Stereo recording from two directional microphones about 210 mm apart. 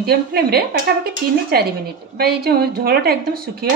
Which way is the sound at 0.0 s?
50° right (ahead or behind).